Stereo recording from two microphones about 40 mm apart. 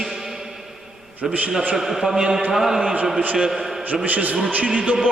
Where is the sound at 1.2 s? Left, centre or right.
Centre.